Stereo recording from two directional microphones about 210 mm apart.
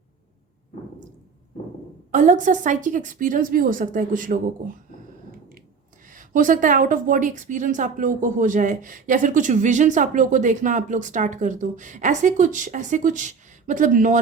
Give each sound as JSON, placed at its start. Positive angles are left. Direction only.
{"t": 2.1, "sound": "a woman's voice", "side_deg": -35}
{"t": 6.1, "sound": "a woman's voice", "side_deg": -40}